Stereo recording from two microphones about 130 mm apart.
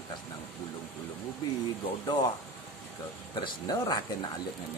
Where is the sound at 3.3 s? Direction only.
35° left (ahead or behind).